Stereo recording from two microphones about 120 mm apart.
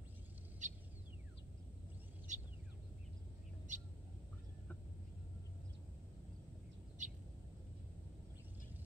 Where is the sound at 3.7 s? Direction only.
90° right.